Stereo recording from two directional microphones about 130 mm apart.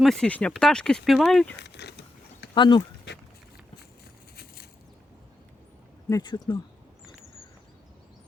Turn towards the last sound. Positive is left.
turn(degrees=35)  # may be behind; listen again after turning